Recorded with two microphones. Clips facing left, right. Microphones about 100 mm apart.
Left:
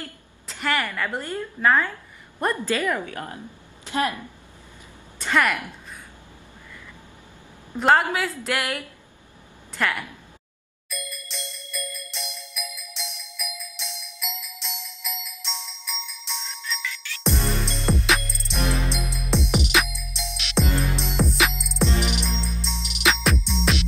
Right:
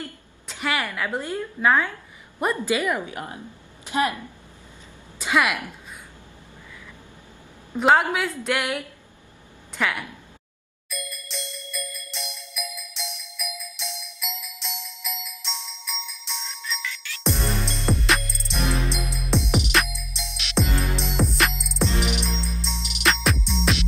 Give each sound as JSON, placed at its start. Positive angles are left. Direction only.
{"t": 0.5, "sound": "a woman's voice", "side_deg": -5}
{"t": 5.2, "sound": "a woman's voice", "side_deg": -5}
{"t": 7.8, "sound": "a woman's voice", "side_deg": 0}
{"t": 10.9, "sound": "music", "side_deg": 0}